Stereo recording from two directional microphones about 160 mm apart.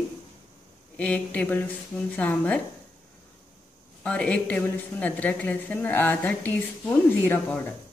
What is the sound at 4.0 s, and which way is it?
A woman's voice, 10° left (ahead or behind).